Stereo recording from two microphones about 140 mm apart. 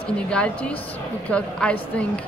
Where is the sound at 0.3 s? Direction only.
10° left (ahead or behind).